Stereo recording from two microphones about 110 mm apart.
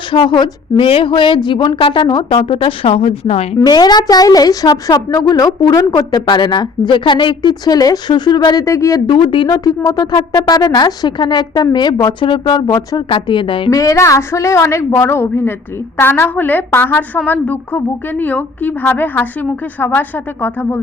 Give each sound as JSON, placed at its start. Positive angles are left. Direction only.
{"t": 0.1, "sound": "a woman's voice", "side_deg": 45}
{"t": 3.7, "sound": "speech", "side_deg": 40}
{"t": 9.0, "sound": "a woman's voice", "side_deg": 45}
{"t": 13.7, "sound": "a woman's voice", "side_deg": 30}